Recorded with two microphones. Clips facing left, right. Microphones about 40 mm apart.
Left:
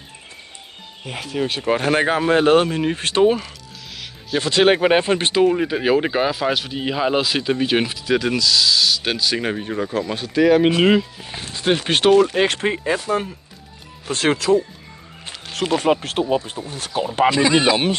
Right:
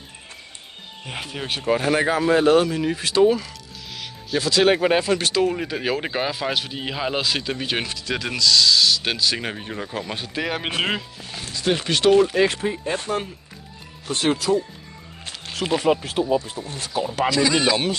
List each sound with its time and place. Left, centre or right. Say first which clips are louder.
1.0 s speech: left 6 dB; centre
1.7 s speech: left 1 dB; left
5.4 s speech: left 5 dB; centre
11.3 s speech: left 3 dB; left
12.4 s speech: left 4 dB; left
14.1 s speech: left 3 dB; left
15.8 s speech: left 2 dB; left